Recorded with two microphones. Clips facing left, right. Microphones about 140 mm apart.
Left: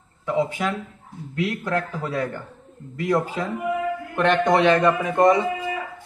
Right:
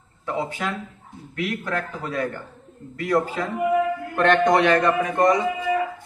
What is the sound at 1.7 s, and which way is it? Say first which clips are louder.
Speech: left 2 dB; 20° left (ahead or behind).